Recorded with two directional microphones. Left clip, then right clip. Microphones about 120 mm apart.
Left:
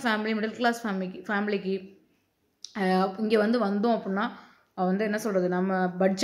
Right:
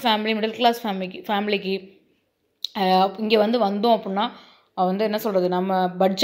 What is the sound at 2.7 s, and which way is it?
Speech, 15° right (ahead or behind).